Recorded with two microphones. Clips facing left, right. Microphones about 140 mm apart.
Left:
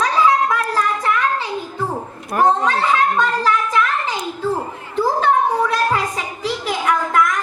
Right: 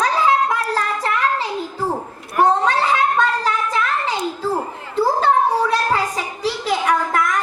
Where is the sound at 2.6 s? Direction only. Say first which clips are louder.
Even; 30° right (ahead or behind).